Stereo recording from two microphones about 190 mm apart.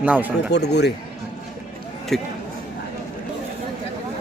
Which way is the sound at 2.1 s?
Centre (ahead or behind).